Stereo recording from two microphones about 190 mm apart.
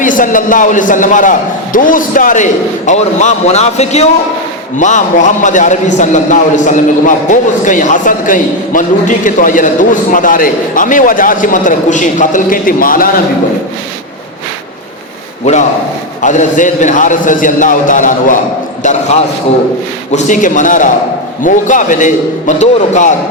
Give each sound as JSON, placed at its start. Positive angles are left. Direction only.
{"t": 0.0, "sound": "a man's voice", "side_deg": 45}
{"t": 16.2, "sound": "a man's voice", "side_deg": 40}